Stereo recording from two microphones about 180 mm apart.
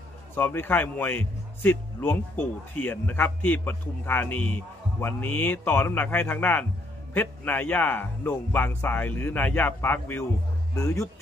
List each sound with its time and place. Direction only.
0.4 s a man's voice: 10° left (ahead or behind)